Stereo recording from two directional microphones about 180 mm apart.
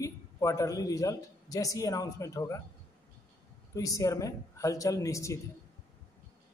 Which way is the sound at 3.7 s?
20° left (ahead or behind).